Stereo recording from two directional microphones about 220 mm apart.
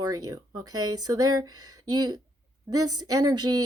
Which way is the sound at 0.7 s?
80° right.